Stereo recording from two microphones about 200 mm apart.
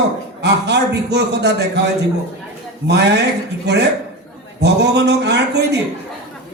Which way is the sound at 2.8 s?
60° right (ahead or behind).